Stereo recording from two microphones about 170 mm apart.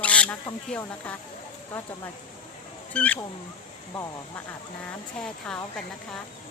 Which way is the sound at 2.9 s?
10° left (ahead or behind).